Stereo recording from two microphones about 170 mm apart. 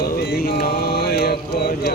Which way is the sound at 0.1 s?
70° left (ahead or behind).